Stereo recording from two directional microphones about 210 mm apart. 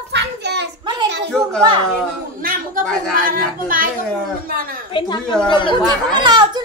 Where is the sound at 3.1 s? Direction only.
40° right (ahead or behind).